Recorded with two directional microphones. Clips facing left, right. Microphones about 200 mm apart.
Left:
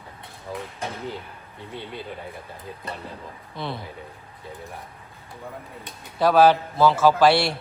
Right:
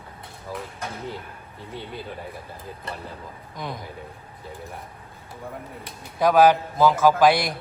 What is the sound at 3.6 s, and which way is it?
Speech, 15° right (ahead or behind).